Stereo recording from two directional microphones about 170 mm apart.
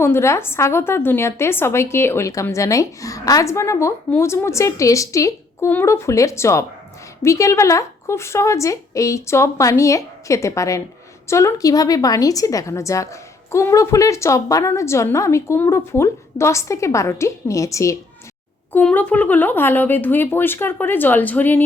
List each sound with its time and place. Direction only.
0.0 s a woman's voice: 15° left (ahead or behind)
18.7 s a woman's voice: 10° left (ahead or behind)